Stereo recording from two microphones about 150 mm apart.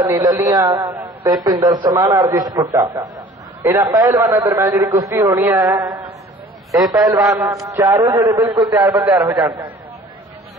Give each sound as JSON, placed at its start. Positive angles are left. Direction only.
{"t": 0.0, "sound": "a man's voice", "side_deg": -20}